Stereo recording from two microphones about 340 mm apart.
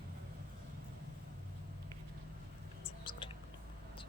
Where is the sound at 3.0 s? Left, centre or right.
Centre.